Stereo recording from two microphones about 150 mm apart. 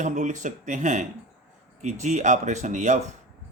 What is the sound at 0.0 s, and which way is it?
Speech, 55° right (ahead or behind).